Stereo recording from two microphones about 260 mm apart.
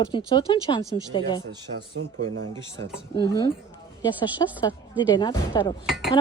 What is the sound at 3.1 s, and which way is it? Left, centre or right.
Speech, centre.